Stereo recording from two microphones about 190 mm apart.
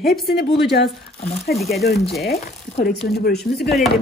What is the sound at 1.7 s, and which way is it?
Speech, 55° left (ahead or behind).